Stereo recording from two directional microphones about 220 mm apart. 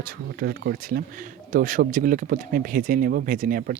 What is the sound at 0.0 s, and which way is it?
Speech, 40° right (ahead or behind).